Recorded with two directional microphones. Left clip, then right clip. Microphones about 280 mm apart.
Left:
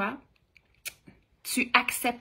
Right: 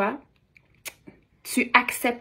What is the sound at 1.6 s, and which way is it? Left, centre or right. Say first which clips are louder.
Speech: right 4 dB; centre.